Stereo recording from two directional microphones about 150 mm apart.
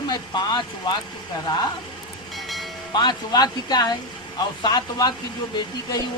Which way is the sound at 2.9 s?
25° left (ahead or behind).